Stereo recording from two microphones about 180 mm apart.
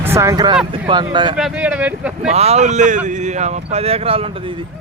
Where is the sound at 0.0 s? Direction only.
15° right (ahead or behind).